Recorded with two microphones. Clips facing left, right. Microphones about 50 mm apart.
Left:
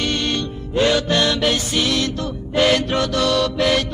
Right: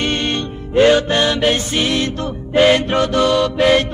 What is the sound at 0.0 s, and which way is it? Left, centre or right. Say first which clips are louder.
Music: right 2 dB; right.